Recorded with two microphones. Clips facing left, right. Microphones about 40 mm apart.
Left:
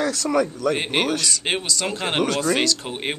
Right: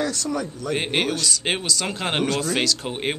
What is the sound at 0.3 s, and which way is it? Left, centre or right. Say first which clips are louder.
Speech: left 6 dB; left.